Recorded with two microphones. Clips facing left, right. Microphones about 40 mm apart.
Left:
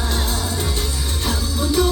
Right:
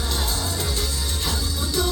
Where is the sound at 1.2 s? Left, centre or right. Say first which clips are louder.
Left 7 dB; left.